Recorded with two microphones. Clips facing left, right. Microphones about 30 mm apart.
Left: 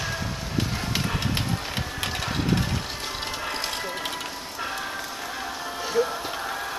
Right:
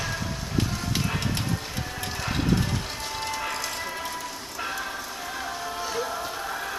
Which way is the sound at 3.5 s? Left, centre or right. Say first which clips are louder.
Left 2 dB; left.